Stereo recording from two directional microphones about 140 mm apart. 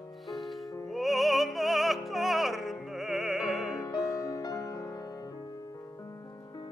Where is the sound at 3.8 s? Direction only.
25° left (ahead or behind).